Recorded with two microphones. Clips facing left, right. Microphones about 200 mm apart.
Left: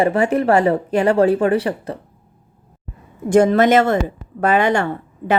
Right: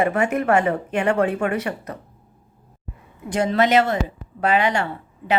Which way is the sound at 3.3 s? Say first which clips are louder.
Left 7 dB; 50° left (ahead or behind).